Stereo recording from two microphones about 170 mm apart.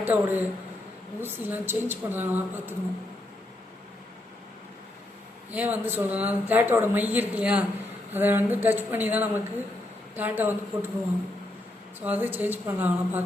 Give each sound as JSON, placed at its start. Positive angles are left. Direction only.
{"t": 0.0, "sound": "a man's voice", "side_deg": -10}
{"t": 5.5, "sound": "speech", "side_deg": -10}
{"t": 11.9, "sound": "speech", "side_deg": -10}